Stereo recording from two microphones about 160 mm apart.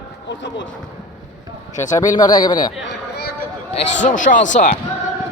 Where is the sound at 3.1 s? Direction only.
80° left.